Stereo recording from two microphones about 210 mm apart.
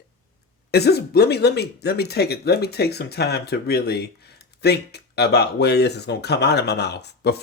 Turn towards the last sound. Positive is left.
turn(degrees=50)  # may be behind; listen again after turning